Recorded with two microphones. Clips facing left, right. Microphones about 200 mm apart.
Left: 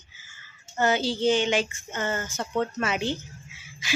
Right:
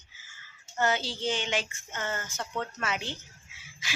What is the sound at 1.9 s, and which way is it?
A woman's voice, 20° left (ahead or behind).